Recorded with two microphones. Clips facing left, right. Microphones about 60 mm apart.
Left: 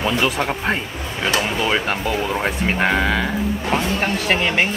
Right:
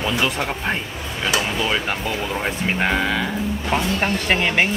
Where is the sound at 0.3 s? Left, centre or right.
Centre.